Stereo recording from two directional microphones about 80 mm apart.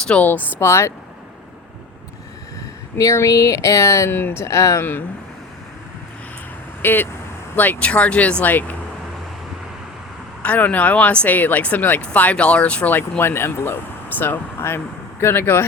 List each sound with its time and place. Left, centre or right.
0.1 s speech: left
3.0 s speech: left
4.8 s speech: left
6.8 s speech: left
10.4 s speech: centre